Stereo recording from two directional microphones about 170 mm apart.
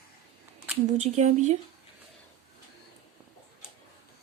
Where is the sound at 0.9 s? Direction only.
45° right (ahead or behind).